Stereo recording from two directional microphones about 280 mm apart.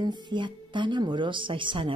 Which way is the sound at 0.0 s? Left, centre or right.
Centre.